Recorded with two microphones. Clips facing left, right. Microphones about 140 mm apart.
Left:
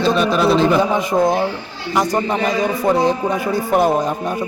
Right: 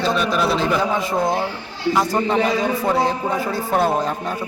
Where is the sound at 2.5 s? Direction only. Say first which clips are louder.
Left 3 dB; 15° left (ahead or behind).